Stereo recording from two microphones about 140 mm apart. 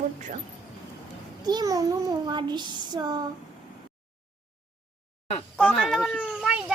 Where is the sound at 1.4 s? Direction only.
30° right (ahead or behind).